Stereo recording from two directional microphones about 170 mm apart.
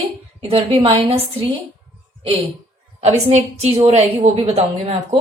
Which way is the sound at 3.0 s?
40° right (ahead or behind).